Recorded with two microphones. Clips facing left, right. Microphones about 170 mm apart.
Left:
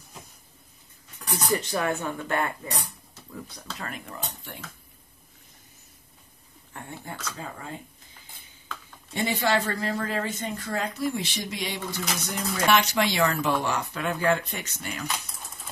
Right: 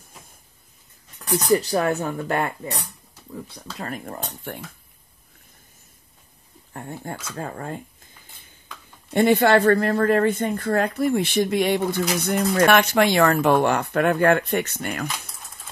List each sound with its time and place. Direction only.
1.3 s speech: 40° right (ahead or behind)
3.7 s speech: 40° right (ahead or behind)
6.7 s speech: 40° right (ahead or behind)
7.3 s speech: 50° right (ahead or behind)
9.1 s speech: 55° right (ahead or behind)